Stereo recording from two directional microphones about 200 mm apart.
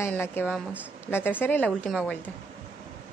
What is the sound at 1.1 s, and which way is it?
A woman's voice, 10° left (ahead or behind).